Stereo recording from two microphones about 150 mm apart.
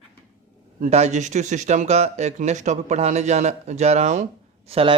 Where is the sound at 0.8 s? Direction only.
50° right (ahead or behind).